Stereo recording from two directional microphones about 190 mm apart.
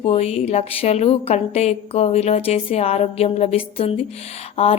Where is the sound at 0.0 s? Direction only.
35° left (ahead or behind).